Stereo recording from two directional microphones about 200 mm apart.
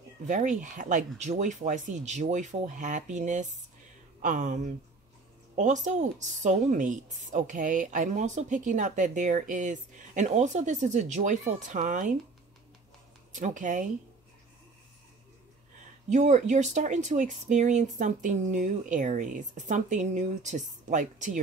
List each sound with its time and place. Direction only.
0.3 s a woman's voice: 40° right (ahead or behind)
5.6 s a woman's voice: 35° right (ahead or behind)
13.3 s a woman's voice: 40° right (ahead or behind)
16.1 s a woman's voice: 35° right (ahead or behind)